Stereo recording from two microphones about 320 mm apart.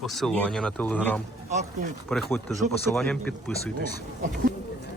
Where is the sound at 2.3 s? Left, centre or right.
Centre.